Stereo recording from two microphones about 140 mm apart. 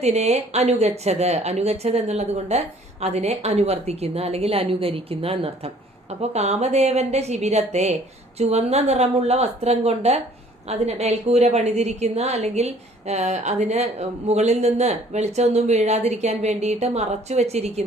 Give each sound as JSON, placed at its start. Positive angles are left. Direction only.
{"t": 0.0, "sound": "speech", "side_deg": -50}